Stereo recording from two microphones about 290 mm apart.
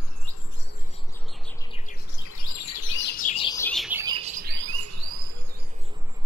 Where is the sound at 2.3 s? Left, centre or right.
Left.